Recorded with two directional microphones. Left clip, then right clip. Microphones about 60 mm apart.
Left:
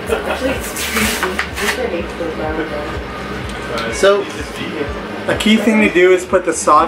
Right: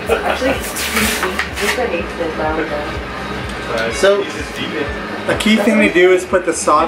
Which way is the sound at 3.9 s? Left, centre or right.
Centre.